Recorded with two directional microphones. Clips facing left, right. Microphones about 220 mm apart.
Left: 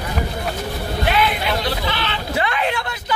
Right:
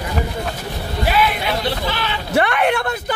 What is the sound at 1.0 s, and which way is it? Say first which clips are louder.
Speech: right 2 dB; 5° right (ahead or behind).